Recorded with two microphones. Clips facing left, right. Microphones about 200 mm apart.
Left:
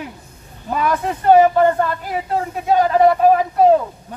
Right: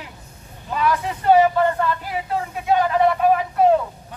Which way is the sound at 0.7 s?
50° left (ahead or behind).